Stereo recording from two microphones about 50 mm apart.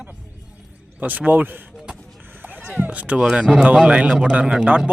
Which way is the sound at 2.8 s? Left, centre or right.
Right.